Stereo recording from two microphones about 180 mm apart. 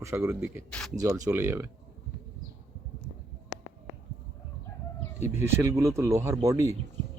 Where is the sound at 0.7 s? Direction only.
5° left (ahead or behind).